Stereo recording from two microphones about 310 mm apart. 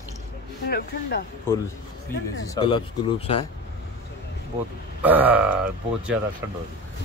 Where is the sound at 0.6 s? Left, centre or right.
Left.